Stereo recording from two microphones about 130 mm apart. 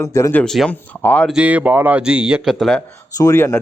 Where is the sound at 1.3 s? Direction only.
10° right (ahead or behind).